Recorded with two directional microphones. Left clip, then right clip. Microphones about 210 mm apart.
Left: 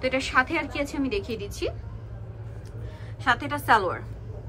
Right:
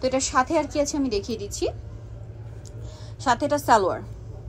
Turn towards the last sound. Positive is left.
turn(degrees=-20)  # may be behind; listen again after turning